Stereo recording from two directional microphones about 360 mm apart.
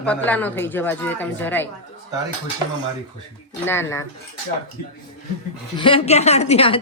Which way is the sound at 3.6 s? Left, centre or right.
Centre.